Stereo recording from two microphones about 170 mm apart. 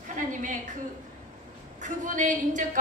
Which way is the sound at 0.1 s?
50° right (ahead or behind).